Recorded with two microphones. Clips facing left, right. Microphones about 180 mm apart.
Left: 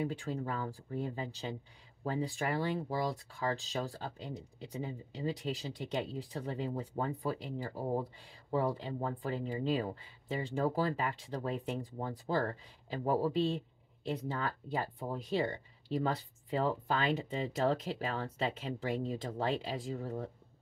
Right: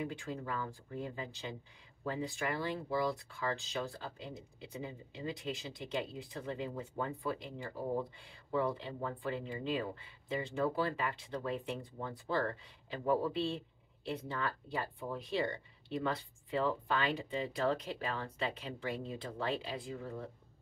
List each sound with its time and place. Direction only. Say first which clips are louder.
0.0 s speech: left 4 dB; 35° left (ahead or behind)